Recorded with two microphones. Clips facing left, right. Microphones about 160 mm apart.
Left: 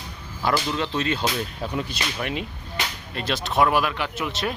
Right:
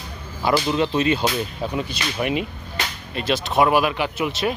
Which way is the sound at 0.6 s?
15° right (ahead or behind).